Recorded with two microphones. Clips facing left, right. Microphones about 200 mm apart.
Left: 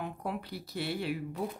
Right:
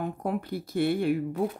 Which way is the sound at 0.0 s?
50° right (ahead or behind).